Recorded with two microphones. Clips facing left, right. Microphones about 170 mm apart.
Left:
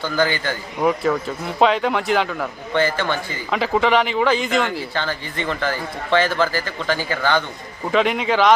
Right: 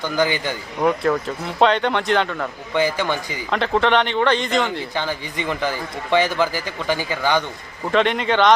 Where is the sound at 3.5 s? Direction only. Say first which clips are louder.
Even; 5° left (ahead or behind).